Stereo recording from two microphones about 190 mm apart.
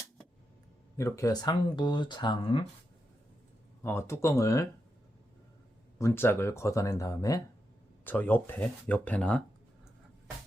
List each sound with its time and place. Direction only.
0.9 s speech: 15° left (ahead or behind)
3.8 s speech: 15° left (ahead or behind)
6.0 s speech: 15° left (ahead or behind)